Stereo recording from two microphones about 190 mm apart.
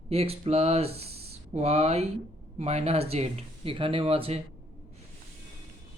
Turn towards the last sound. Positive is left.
turn(degrees=-30)  # may be behind; listen again after turning